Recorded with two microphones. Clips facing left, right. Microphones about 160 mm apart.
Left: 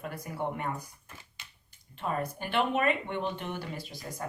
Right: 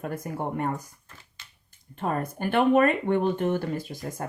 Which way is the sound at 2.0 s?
50° right (ahead or behind).